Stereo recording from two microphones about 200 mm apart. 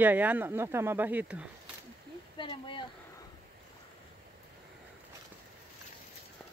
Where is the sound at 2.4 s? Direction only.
25° left (ahead or behind).